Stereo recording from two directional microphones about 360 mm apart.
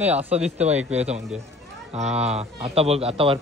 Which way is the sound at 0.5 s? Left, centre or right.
Centre.